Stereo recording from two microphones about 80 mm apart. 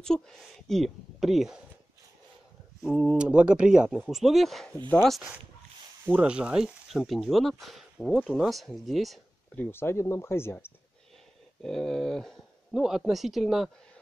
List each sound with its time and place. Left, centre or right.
0.0 s speech: centre
3.1 s speech: centre
3.9 s speech: centre
6.0 s speech: right
6.3 s speech: centre
9.6 s speech: left
11.6 s speech: centre
12.7 s speech: centre